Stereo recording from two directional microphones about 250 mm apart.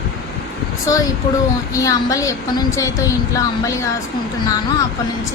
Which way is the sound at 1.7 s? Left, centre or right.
Centre.